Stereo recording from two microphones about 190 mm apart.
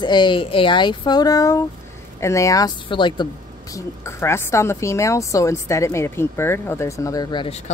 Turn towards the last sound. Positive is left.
turn(degrees=30)  # may be behind; listen again after turning